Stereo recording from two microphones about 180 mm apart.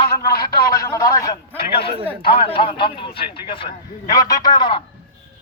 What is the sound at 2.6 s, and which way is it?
A man's voice, 30° left (ahead or behind).